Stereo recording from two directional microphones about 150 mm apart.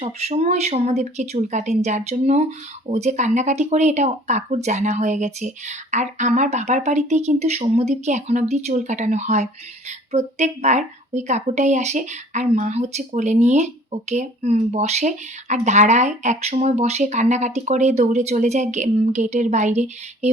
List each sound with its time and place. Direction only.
0.0 s speech: 45° right (ahead or behind)